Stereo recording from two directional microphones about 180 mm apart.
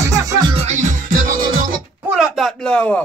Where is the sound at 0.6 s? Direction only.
45° right (ahead or behind).